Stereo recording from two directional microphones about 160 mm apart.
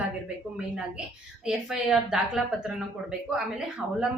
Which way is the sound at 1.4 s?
5° right (ahead or behind).